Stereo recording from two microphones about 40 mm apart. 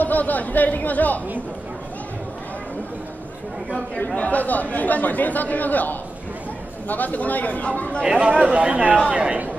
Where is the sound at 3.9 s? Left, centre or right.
Left.